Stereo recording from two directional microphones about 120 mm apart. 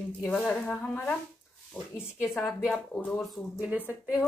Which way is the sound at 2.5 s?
Centre (ahead or behind).